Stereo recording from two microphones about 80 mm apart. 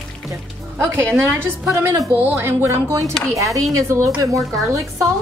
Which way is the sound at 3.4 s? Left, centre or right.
Right.